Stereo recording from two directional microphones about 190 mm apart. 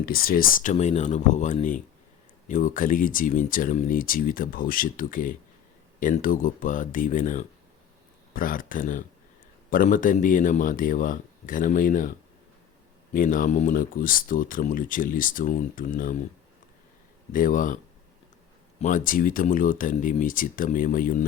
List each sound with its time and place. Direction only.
0.0 s speech: 50° left (ahead or behind)
13.1 s speech: 45° left (ahead or behind)
17.3 s speech: 45° left (ahead or behind)
18.8 s speech: 40° left (ahead or behind)